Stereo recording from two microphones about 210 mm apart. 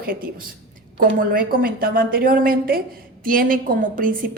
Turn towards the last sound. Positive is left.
turn(degrees=-40)  # may be behind; listen again after turning